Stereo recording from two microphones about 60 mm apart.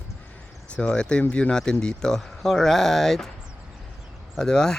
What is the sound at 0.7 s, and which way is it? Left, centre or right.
Speech, centre.